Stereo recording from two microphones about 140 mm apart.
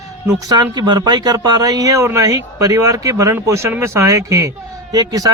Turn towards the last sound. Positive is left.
turn(degrees=-25)  # may be behind; listen again after turning